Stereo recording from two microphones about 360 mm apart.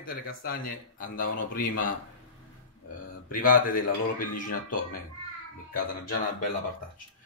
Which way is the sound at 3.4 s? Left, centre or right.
Left.